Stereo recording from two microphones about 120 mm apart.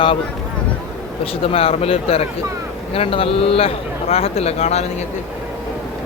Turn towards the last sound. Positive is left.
turn(degrees=65)  # may be behind; listen again after turning